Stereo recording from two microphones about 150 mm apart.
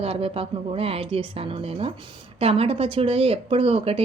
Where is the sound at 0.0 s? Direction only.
40° right (ahead or behind).